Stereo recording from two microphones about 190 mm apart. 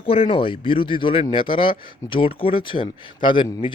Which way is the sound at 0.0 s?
30° left (ahead or behind).